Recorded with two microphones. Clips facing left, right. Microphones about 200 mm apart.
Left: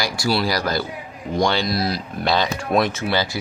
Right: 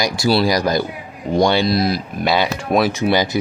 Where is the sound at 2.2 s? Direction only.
5° right (ahead or behind).